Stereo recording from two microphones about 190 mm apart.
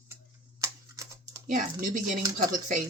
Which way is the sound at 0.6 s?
15° right (ahead or behind).